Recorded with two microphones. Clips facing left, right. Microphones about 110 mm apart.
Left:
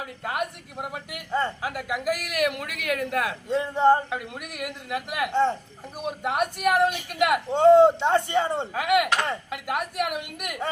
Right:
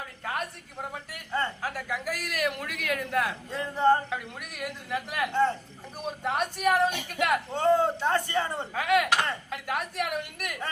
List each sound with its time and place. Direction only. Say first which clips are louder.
0.0 s a woman's voice: left 4 dB; 15° left (ahead or behind)
3.5 s a man's voice: left 4 dB; 20° left (ahead or behind)
4.4 s speech: left 3 dB; 5° left (ahead or behind)
5.3 s a man's voice: left 3 dB; 20° left (ahead or behind)
6.0 s speech: left 3 dB; 10° left (ahead or behind)
7.5 s a man's voice: left 11 dB; 20° left (ahead or behind)
8.7 s speech: left 1 dB; 5° left (ahead or behind)